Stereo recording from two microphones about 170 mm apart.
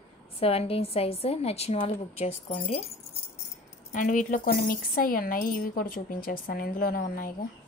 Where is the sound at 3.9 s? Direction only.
50° left (ahead or behind).